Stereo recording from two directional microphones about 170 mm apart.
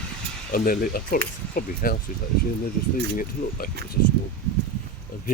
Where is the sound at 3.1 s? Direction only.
55° left (ahead or behind).